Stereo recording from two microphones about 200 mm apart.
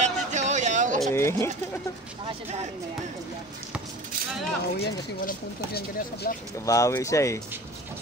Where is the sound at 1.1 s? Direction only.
15° left (ahead or behind).